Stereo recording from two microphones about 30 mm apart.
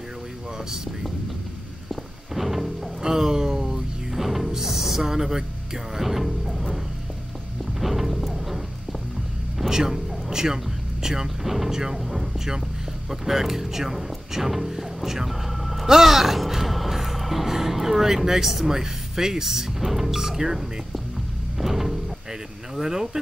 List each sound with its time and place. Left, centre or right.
1.9 s music: centre
3.0 s a sound: centre
4.1 s music: centre
5.9 s speech: centre
7.8 s music: centre
9.7 s speech: centre
21.5 s music: centre
22.8 s speech: centre